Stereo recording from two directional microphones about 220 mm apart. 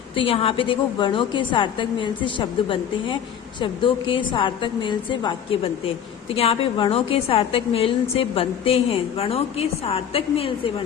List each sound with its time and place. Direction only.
0.2 s a woman's voice: 25° left (ahead or behind)